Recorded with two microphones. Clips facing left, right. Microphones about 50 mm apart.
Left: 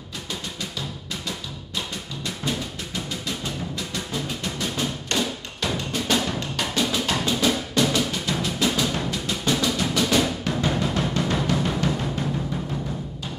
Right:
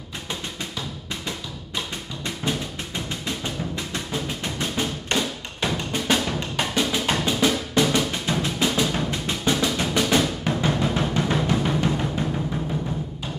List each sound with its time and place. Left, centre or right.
4.4 s music: right
5.1 s thump: right
5.6 s music: right
10.6 s drum: centre